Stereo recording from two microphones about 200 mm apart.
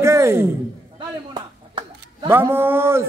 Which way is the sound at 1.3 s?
25° right (ahead or behind).